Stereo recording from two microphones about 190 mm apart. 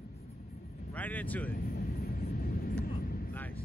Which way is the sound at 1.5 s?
50° left (ahead or behind).